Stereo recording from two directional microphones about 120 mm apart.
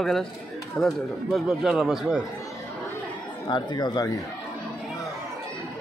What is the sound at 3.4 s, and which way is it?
Speech, 40° left (ahead or behind).